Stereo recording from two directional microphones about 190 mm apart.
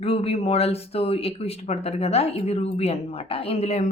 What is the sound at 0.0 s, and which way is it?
Speech, 30° left (ahead or behind).